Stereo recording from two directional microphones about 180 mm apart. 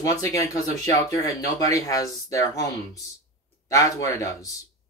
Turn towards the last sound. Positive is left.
turn(degrees=20)  # may be behind; listen again after turning